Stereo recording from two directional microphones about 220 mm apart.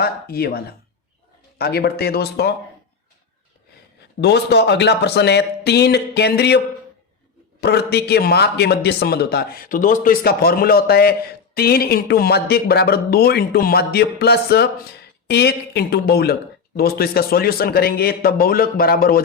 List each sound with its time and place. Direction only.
0.0 s a man's voice: 45° left (ahead or behind)
4.2 s a man's voice: 50° left (ahead or behind)
7.6 s a man's voice: 50° left (ahead or behind)